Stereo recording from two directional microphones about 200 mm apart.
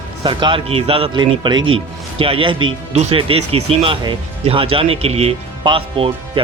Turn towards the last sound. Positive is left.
turn(degrees=-25)  # may be behind; listen again after turning